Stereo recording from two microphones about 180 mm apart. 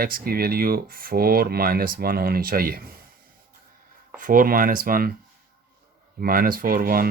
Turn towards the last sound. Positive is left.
turn(degrees=-55)  # may be behind; listen again after turning